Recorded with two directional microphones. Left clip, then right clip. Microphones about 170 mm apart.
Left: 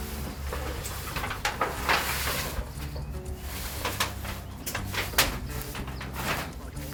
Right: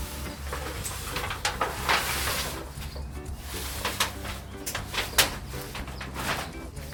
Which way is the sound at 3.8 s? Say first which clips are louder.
Right 1 dB; centre (ahead or behind).